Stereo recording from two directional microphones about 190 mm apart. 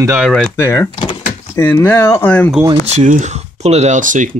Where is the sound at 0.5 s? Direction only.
10° left (ahead or behind).